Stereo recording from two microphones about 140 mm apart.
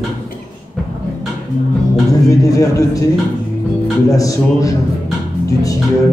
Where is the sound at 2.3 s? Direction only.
25° left (ahead or behind).